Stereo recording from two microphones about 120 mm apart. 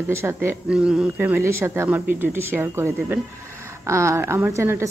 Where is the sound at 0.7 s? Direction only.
5° right (ahead or behind).